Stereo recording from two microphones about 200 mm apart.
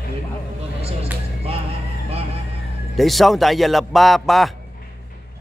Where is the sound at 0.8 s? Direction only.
30° right (ahead or behind).